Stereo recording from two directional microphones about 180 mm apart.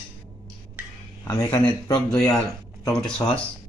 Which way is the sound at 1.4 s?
5° left (ahead or behind).